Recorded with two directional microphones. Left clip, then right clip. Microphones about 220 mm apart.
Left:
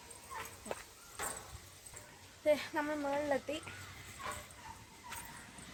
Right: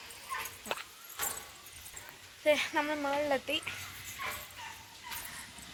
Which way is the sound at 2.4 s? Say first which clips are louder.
Right 4 dB; 20° right (ahead or behind).